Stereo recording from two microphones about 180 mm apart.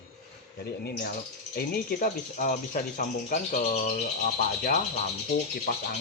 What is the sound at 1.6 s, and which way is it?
Speech, 55° left (ahead or behind).